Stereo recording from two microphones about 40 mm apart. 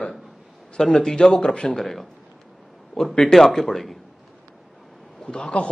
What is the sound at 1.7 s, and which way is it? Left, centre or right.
Speech, centre.